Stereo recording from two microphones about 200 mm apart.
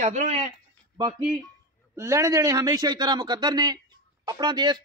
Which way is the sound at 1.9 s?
15° right (ahead or behind).